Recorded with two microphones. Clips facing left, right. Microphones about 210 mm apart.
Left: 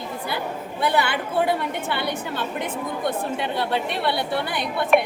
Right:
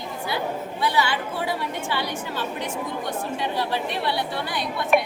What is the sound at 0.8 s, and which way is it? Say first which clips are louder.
A woman's voice: left 2 dB; 55° left (ahead or behind).